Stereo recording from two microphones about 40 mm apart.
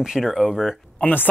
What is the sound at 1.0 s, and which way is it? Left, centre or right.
Speech, left.